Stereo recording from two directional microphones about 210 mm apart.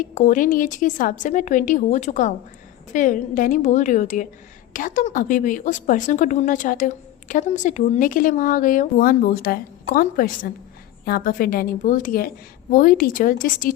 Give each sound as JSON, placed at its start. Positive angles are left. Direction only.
{"t": 0.0, "sound": "a woman's voice", "side_deg": 35}